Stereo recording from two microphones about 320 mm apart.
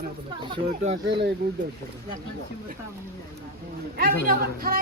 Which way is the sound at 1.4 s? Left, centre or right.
Right.